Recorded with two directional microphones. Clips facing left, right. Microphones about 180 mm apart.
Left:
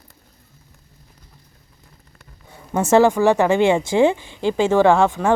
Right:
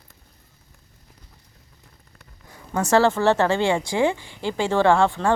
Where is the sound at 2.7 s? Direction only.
20° left (ahead or behind).